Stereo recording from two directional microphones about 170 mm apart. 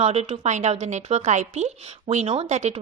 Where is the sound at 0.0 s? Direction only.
40° right (ahead or behind).